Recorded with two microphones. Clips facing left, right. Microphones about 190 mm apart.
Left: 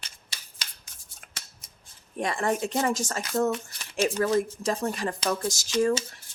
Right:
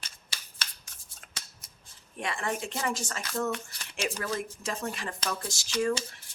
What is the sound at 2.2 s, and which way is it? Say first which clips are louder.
A woman's voice: left 6 dB; 40° left (ahead or behind).